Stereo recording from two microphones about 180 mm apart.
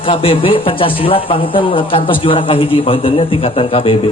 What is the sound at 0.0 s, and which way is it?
A man's voice, 30° left (ahead or behind).